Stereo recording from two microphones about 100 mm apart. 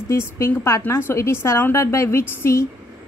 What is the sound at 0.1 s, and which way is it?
A woman's voice, 25° left (ahead or behind).